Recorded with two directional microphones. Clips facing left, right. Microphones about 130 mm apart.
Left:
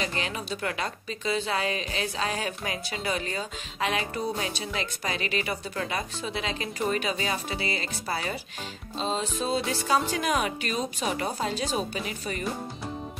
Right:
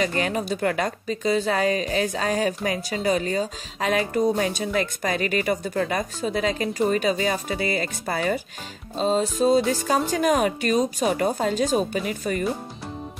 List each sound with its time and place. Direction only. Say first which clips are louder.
0.0 s a woman's voice: right 8 dB; 45° right (ahead or behind)